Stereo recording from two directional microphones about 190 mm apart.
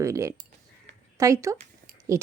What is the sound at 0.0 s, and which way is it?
Speech, 15° right (ahead or behind).